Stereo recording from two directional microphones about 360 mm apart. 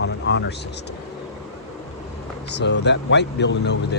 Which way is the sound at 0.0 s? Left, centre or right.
Left.